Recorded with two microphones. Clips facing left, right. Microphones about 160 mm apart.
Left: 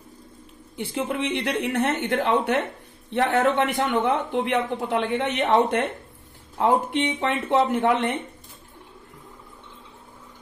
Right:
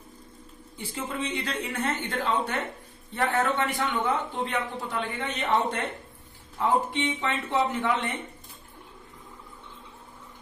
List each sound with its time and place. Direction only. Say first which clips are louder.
0.7 s a man's voice: left 6 dB; 70° left (ahead or behind)
7.2 s speech: left 7 dB; 65° left (ahead or behind)